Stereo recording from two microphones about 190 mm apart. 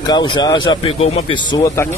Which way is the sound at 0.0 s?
25° left (ahead or behind).